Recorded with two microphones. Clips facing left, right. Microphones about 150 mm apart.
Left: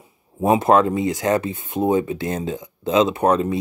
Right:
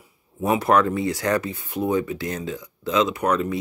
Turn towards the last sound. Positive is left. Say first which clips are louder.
# left 4 dB
turn(degrees=25)  # may be behind; listen again after turning